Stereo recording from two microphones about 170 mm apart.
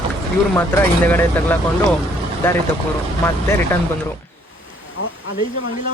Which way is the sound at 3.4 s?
15° left (ahead or behind).